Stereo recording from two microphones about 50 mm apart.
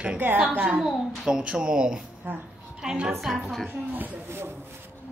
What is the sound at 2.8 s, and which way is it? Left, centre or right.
Speech, centre.